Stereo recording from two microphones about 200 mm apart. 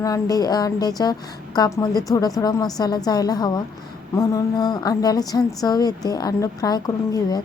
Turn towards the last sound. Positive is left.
turn(degrees=20)  # may be behind; listen again after turning